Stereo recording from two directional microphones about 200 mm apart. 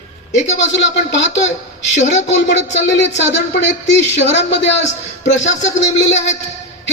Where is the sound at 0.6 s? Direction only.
65° left (ahead or behind).